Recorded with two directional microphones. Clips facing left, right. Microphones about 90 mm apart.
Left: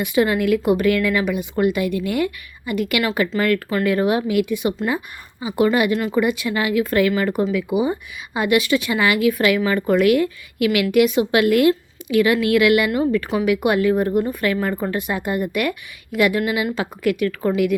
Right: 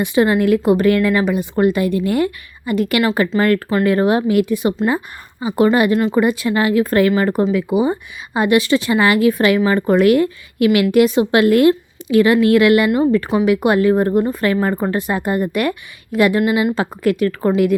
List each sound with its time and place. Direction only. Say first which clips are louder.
0.0 s a woman's voice: right 4 dB; 30° right (ahead or behind)